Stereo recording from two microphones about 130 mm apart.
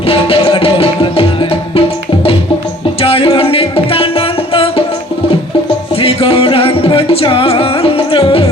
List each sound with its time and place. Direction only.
0.0 s music: 45° left (ahead or behind)
3.0 s music: 50° left (ahead or behind)
5.9 s music: 45° left (ahead or behind)